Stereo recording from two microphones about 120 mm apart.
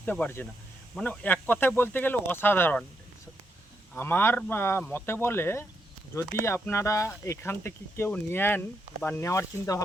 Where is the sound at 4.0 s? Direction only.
20° left (ahead or behind).